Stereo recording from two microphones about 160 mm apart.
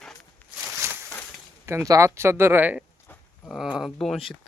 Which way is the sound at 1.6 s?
20° right (ahead or behind).